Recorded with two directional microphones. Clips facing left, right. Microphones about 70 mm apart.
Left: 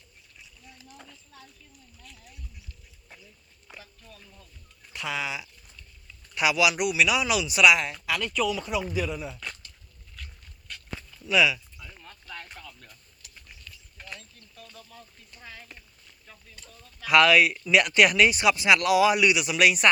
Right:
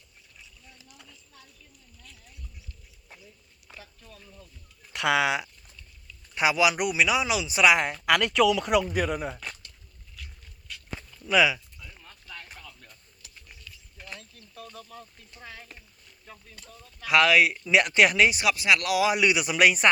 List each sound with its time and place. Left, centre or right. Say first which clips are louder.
4.9 s speech: right 8 dB; right
6.3 s speech: right 1 dB; right
8.0 s speech: right 6 dB; right
8.9 s speech: right 3 dB; right
11.3 s speech: right 1 dB; right
12.5 s a sound: left 1 dB; centre
15.3 s speech: left 1 dB; centre
17.0 s speech: left 1 dB; centre
18.4 s speech: left 3 dB; centre
19.2 s speech: even; right